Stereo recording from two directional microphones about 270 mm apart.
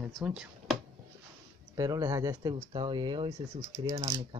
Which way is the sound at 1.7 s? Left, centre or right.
Centre.